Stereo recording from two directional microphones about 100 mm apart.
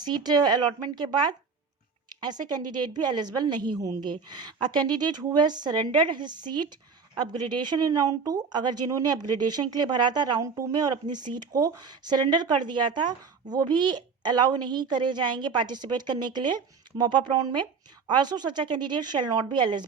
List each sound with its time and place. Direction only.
0.0 s speech: 45° right (ahead or behind)